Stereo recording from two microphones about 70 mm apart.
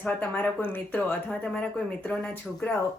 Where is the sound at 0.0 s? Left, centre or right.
Left.